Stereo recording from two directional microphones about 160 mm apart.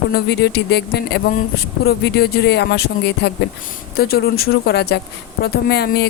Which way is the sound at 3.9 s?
75° left (ahead or behind).